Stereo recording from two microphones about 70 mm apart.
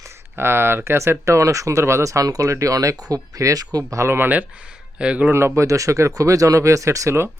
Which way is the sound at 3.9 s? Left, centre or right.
Right.